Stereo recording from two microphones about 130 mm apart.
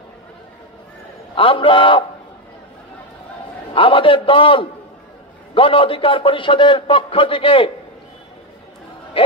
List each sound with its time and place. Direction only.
1.3 s a man's voice: 40° left (ahead or behind)
3.7 s a man's voice: 40° left (ahead or behind)